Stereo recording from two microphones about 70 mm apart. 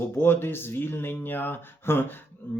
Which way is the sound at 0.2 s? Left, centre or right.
Left.